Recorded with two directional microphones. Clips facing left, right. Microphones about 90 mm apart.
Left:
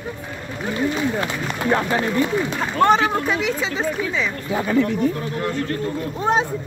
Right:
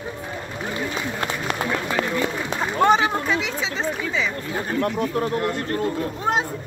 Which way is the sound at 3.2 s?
5° left (ahead or behind).